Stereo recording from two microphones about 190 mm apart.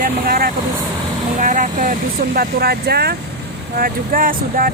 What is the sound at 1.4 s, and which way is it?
Speech, 45° right (ahead or behind).